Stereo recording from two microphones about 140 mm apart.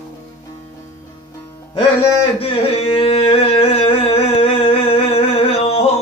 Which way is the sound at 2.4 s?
45° left (ahead or behind).